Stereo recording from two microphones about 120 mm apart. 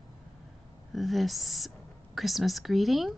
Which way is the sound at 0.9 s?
Centre (ahead or behind).